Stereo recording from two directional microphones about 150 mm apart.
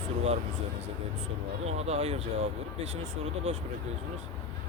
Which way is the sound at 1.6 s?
45° right (ahead or behind).